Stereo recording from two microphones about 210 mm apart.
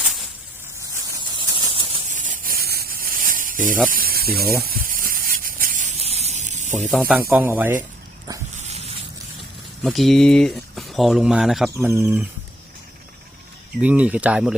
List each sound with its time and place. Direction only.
0.0 s snake: centre (ahead or behind)
0.8 s snake: 15° right (ahead or behind); by 3.8 s 40° right (ahead or behind)
3.8 s speech: 45° right (ahead or behind)
4.6 s spray: 45° right (ahead or behind)
7.0 s speech: 5° right (ahead or behind)
8.6 s a sound: 30° right (ahead or behind)
9.8 s speech: centre (ahead or behind)
11.9 s speech: 15° right (ahead or behind)
13.8 s speech: 5° right (ahead or behind)